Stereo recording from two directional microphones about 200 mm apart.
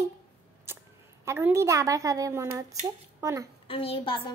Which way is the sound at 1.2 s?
15° right (ahead or behind).